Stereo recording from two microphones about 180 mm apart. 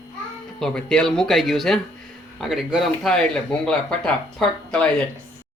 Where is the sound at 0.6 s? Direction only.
5° left (ahead or behind).